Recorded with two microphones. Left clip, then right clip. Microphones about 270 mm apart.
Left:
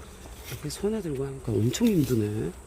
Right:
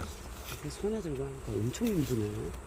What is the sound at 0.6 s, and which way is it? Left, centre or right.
Speech, left.